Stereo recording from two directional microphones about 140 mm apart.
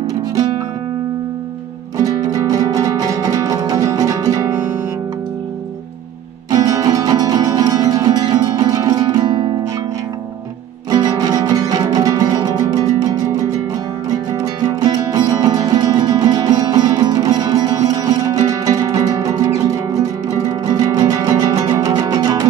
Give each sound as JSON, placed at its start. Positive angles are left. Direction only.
{"t": 2.0, "sound": "music", "side_deg": -25}
{"t": 6.5, "sound": "music", "side_deg": -25}
{"t": 10.9, "sound": "music", "side_deg": -30}